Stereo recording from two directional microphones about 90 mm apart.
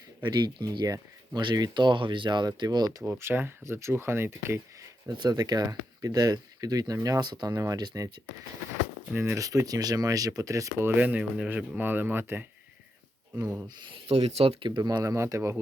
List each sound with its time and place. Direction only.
0.3 s speech: 50° right (ahead or behind)
3.1 s speech: 25° right (ahead or behind)
5.0 s speech: 50° right (ahead or behind)
9.1 s speech: 35° right (ahead or behind)
10.9 s speech: 20° right (ahead or behind)
13.8 s speech: 80° right
14.8 s speech: 45° right (ahead or behind); by 15.5 s 30° right (ahead or behind)